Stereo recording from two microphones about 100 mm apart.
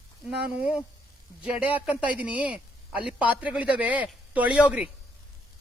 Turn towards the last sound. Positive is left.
turn(degrees=-10)  # may be behind; listen again after turning